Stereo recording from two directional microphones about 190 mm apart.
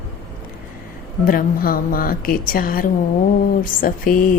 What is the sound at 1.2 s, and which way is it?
A woman's voice, 50° left (ahead or behind).